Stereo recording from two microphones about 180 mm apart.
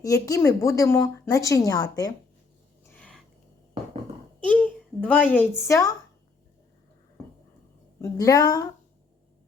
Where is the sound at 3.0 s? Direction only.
5° left (ahead or behind).